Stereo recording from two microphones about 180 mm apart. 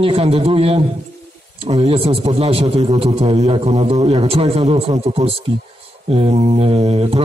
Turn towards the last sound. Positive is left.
turn(degrees=-35)  # may be behind; listen again after turning